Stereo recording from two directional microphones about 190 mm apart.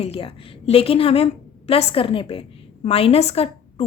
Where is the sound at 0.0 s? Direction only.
30° left (ahead or behind).